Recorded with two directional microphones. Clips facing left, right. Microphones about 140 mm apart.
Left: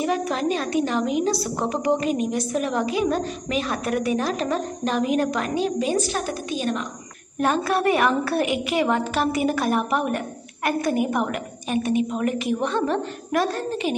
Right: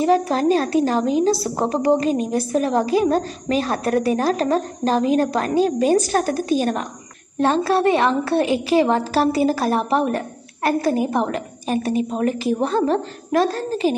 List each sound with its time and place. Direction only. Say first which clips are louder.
0.0 s a woman's voice: right 6 dB; 35° right (ahead or behind)
7.3 s a woman's voice: right 4 dB; 30° right (ahead or behind)